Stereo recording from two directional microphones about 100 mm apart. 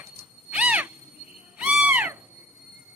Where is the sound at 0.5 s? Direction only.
15° right (ahead or behind).